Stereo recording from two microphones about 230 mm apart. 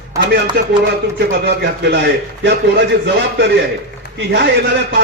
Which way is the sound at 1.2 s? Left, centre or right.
Right.